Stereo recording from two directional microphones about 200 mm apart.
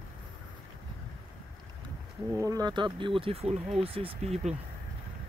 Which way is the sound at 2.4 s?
20° right (ahead or behind).